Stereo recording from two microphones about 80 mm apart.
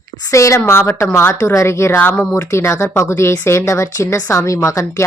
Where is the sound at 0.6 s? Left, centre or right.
Left.